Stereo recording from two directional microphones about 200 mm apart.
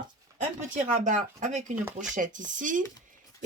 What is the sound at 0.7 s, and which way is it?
Speech, 40° right (ahead or behind).